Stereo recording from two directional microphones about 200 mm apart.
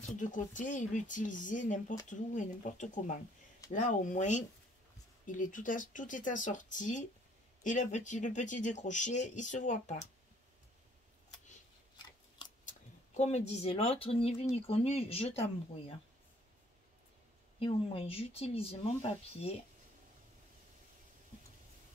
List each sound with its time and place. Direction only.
0.0 s speech: 40° left (ahead or behind)
12.6 s speech: 35° left (ahead or behind)
17.6 s speech: 30° left (ahead or behind)